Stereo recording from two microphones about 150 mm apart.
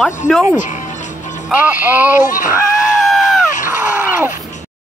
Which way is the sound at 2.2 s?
60° left (ahead or behind).